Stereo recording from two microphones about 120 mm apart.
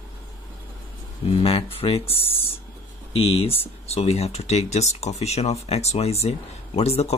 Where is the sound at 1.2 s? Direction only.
50° left (ahead or behind).